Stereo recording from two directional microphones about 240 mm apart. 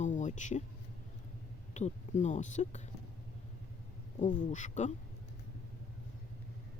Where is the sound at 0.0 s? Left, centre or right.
Left.